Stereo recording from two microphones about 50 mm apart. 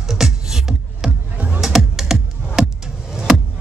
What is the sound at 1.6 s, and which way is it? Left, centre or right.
Music, centre.